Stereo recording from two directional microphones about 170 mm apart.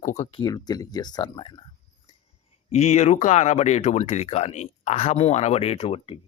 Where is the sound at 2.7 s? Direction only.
40° left (ahead or behind).